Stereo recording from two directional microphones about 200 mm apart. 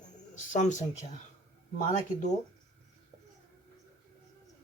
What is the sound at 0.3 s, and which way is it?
Speech, 35° left (ahead or behind).